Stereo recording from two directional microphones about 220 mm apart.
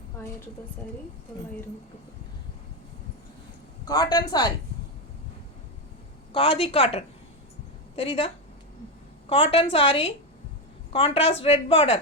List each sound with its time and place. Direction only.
3.8 s speech: 15° left (ahead or behind)
6.3 s speech: 25° left (ahead or behind)
9.3 s speech: 25° left (ahead or behind)